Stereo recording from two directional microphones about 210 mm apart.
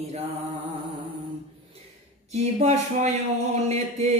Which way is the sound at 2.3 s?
30° right (ahead or behind).